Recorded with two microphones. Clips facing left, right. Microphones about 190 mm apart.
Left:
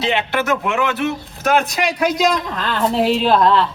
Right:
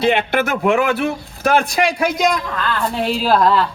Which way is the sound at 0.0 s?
50° right (ahead or behind).